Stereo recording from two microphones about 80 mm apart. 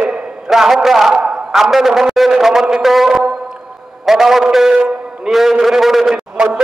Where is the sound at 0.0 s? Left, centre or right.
Centre.